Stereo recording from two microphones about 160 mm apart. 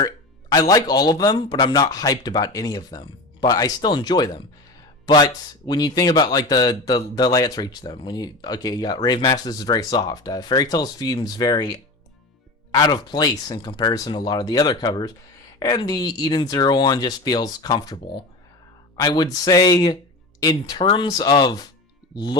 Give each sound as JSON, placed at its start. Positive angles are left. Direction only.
{"t": 0.5, "sound": "speech", "side_deg": 25}